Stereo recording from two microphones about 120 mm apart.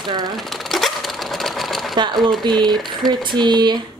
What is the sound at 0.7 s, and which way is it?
Sewing machine, centre (ahead or behind).